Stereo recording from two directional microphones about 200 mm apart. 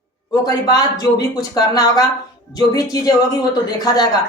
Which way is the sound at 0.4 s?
20° left (ahead or behind).